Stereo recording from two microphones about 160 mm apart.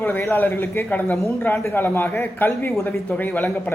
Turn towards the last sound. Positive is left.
turn(degrees=10)  # may be behind; listen again after turning